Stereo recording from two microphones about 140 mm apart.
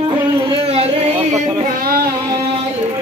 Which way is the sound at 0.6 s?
45° right (ahead or behind).